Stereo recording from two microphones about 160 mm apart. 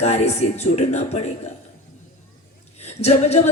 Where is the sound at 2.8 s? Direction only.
40° left (ahead or behind).